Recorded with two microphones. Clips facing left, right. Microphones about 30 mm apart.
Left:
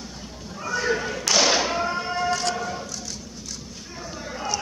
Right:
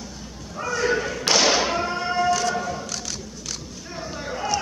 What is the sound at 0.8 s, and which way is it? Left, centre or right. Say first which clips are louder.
Thump: right 3 dB; centre.